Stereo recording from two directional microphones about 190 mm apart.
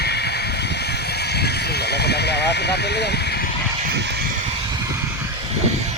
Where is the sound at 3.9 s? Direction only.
60° right (ahead or behind).